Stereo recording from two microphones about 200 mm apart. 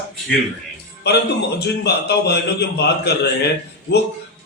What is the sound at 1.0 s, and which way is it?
A man's voice, 55° left (ahead or behind).